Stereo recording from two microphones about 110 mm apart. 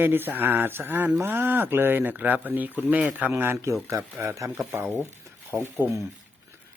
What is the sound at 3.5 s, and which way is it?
Speech, 30° right (ahead or behind).